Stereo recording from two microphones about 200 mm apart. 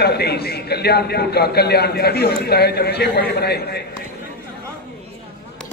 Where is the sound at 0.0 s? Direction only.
55° left (ahead or behind).